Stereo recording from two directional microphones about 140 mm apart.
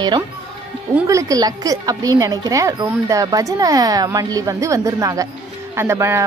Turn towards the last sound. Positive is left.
turn(degrees=-20)  # may be behind; listen again after turning